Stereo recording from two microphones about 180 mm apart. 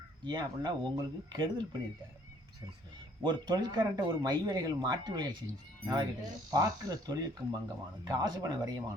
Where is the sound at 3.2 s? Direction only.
25° right (ahead or behind).